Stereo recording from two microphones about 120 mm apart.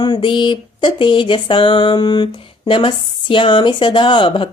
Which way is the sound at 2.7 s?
45° left (ahead or behind).